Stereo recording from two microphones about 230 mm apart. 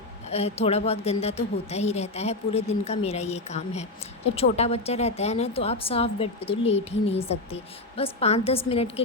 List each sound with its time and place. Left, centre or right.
0.3 s a woman's voice: left